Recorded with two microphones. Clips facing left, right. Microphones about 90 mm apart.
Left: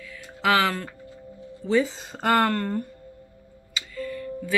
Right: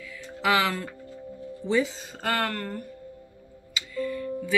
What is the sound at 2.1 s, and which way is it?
Speech, 30° left (ahead or behind).